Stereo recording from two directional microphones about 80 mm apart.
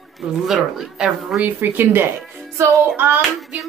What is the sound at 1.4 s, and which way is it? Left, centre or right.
Speech, right.